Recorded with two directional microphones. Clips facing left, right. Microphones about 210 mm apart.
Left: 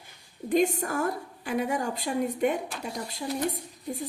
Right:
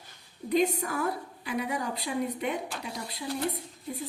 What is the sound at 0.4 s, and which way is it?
A woman's voice, 45° left (ahead or behind).